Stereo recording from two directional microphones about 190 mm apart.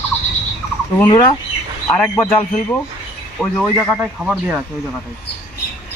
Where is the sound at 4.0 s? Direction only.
5° right (ahead or behind).